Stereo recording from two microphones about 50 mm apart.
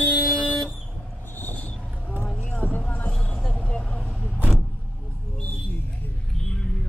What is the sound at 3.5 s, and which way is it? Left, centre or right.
Vehicle, left.